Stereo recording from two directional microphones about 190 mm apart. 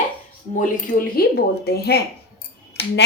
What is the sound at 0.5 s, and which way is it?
A woman's voice, 45° left (ahead or behind).